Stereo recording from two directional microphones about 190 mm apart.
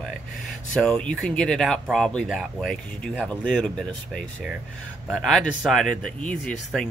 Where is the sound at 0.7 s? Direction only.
5° left (ahead or behind).